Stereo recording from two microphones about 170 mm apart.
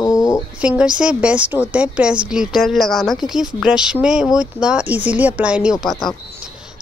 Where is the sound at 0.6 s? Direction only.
5° right (ahead or behind).